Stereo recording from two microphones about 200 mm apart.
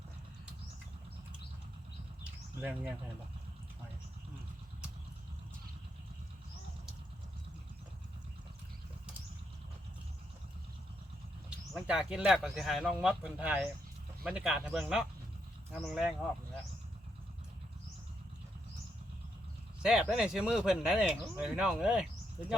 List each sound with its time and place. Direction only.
2.6 s speech: 10° right (ahead or behind)
11.4 s speech: 5° right (ahead or behind)
19.8 s speech: 5° right (ahead or behind)